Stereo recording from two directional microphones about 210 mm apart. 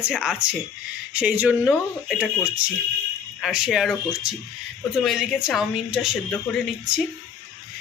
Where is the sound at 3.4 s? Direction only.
5° right (ahead or behind).